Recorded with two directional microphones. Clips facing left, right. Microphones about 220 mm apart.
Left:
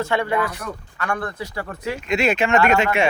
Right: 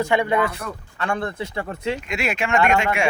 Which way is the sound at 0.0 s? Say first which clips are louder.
Right 2 dB; 15° right (ahead or behind).